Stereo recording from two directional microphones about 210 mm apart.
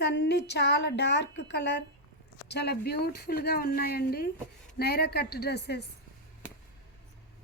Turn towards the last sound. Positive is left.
turn(degrees=50)  # may be behind; listen again after turning